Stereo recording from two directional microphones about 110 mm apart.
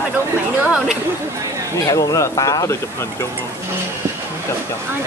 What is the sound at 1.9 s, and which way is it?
Speech, 30° left (ahead or behind).